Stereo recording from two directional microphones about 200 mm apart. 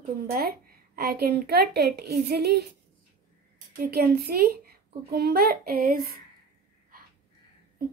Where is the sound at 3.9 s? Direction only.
50° right (ahead or behind).